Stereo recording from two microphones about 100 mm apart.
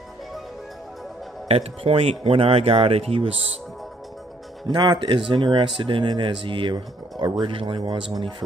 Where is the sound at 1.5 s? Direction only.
75° right (ahead or behind).